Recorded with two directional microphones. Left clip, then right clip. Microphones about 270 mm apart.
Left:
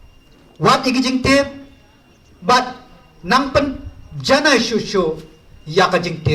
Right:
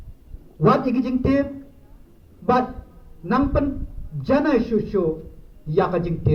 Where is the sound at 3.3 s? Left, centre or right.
Left.